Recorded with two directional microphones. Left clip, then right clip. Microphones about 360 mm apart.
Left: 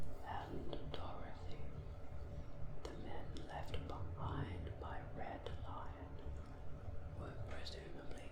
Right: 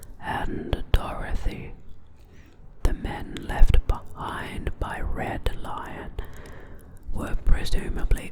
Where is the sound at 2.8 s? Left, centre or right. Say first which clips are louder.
Right 18 dB; right.